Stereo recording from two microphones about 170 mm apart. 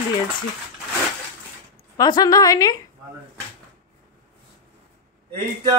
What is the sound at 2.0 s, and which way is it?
Speech, 25° left (ahead or behind).